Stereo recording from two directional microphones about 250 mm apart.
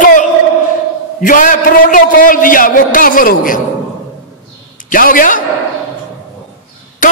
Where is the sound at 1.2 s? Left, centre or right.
Left.